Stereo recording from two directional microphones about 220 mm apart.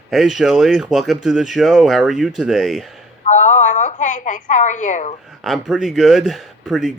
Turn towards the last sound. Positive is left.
turn(degrees=0)  # may be behind; listen again after turning